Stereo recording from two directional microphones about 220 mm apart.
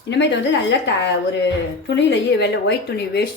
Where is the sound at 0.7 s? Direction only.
55° left (ahead or behind).